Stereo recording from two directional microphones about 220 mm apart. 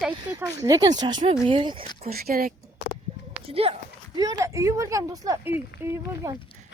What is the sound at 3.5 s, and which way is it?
Speech, 25° right (ahead or behind).